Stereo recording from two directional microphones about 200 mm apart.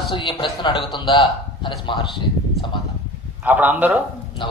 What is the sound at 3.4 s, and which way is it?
Speech, 10° right (ahead or behind).